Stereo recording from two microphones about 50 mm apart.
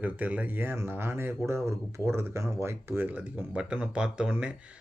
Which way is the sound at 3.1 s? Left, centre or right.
Right.